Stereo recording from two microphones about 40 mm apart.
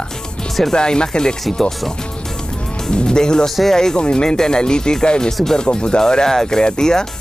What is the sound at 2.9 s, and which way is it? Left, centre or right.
Speech, left.